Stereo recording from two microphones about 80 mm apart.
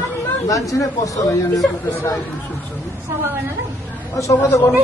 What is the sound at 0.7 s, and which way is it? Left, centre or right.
Speech, left.